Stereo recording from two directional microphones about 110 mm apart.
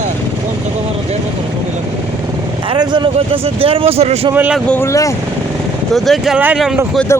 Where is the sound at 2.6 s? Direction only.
45° right (ahead or behind).